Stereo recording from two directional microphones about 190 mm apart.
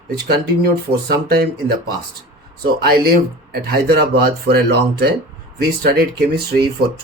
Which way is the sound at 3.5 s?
55° right (ahead or behind).